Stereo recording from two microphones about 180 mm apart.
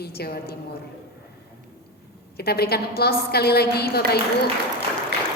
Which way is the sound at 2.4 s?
60° left (ahead or behind).